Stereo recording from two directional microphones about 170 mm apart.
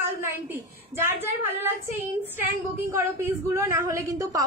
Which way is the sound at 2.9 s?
15° right (ahead or behind).